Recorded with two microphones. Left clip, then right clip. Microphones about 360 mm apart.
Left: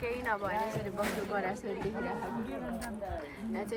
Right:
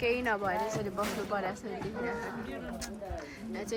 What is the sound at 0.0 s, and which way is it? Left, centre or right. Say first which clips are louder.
A woman's voice: right 4 dB; centre.